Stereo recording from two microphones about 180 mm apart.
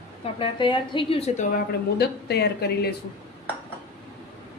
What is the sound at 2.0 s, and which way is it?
Speech, 65° left (ahead or behind).